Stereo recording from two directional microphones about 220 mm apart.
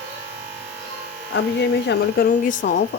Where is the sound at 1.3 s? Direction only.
50° left (ahead or behind).